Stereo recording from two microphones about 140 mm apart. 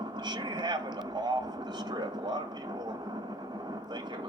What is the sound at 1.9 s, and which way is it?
Speech, 30° right (ahead or behind).